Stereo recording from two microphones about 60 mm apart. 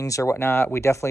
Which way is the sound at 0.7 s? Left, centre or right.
Left.